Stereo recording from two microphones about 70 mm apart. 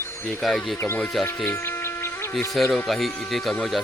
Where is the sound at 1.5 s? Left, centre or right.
Left.